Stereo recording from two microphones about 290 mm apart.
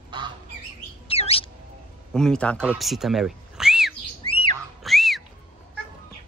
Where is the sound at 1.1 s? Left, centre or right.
Centre.